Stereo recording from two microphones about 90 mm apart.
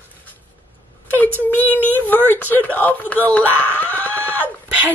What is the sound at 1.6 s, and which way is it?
Speech, 20° left (ahead or behind).